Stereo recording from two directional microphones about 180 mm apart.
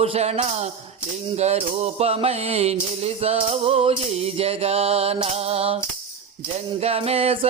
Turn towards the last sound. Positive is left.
turn(degrees=-35)  # may be behind; listen again after turning